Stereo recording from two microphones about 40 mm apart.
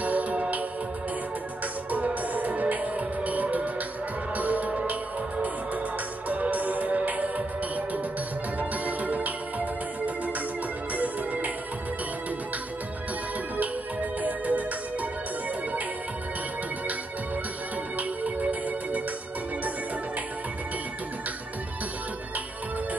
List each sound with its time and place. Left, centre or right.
0.0 s music: right
2.3 s music: right
6.2 s music: right
14.2 s music: right
17.9 s music: right